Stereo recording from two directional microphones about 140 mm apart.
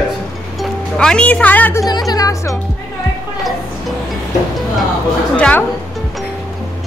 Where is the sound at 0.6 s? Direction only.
5° left (ahead or behind).